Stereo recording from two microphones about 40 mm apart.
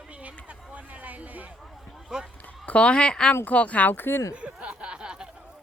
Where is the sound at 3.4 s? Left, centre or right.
Left.